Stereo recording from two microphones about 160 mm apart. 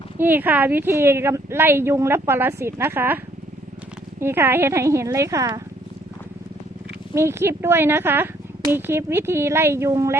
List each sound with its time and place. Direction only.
0.2 s speech: 10° right (ahead or behind)
4.2 s speech: 15° right (ahead or behind)
7.1 s speech: 15° right (ahead or behind)